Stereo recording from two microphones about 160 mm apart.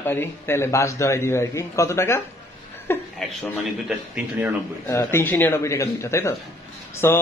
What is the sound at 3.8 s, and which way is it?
Speech, 5° right (ahead or behind).